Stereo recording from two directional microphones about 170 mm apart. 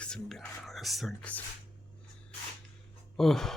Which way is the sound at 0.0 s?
5° left (ahead or behind).